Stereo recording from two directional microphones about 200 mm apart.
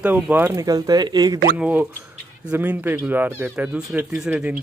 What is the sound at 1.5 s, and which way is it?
Speech, 5° right (ahead or behind).